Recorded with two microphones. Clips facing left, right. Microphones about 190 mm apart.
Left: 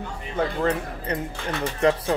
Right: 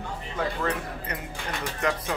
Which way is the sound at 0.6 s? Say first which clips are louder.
Left 5 dB; 30° left (ahead or behind).